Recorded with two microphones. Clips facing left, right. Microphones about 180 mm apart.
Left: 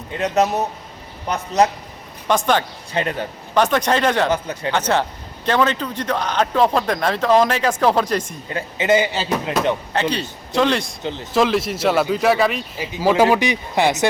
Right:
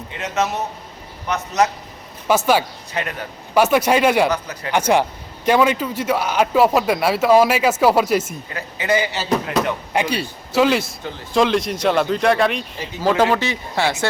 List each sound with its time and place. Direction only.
0.2 s speech: 35° left (ahead or behind)
2.2 s speech: 5° right (ahead or behind)
2.9 s speech: 30° left (ahead or behind)
3.5 s a man's voice: 10° right (ahead or behind)
4.3 s speech: 25° left (ahead or behind)
4.7 s a man's voice: 15° right (ahead or behind)
8.4 s speech: 25° left (ahead or behind)
9.9 s a man's voice: 10° right (ahead or behind); by 13.9 s 15° left (ahead or behind)